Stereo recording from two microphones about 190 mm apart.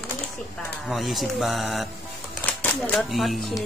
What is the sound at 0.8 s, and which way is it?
A woman's voice, centre (ahead or behind).